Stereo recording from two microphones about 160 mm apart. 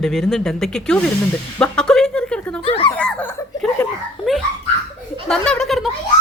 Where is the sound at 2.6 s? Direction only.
35° left (ahead or behind).